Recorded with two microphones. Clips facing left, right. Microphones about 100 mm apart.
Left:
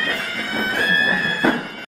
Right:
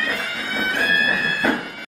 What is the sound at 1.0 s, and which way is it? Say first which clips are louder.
Music: left 1 dB; centre (ahead or behind).